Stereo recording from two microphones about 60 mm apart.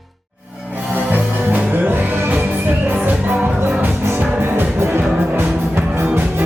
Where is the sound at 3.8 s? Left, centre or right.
Right.